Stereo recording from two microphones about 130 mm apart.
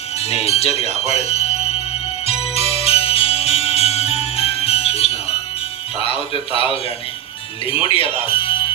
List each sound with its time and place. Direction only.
0.2 s speech: 50° left (ahead or behind)
2.2 s music: 50° left (ahead or behind)
6.0 s speech: 45° left (ahead or behind)